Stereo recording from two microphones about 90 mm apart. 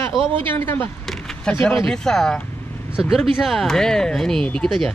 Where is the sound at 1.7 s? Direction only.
5° left (ahead or behind).